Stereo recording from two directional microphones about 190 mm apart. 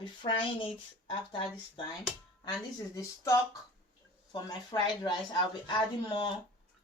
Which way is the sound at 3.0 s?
15° left (ahead or behind).